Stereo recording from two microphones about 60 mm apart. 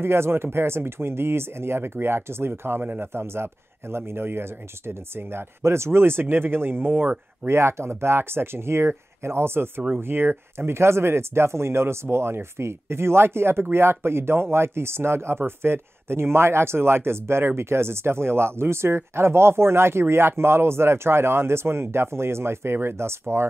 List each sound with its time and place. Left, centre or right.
0.0 s a man's voice: right
7.5 s speech: right